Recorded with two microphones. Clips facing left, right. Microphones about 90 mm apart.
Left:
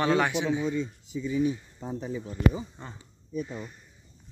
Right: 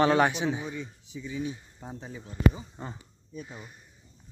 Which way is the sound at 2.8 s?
20° right (ahead or behind).